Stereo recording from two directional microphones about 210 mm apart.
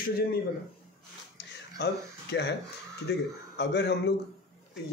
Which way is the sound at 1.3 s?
55° left (ahead or behind).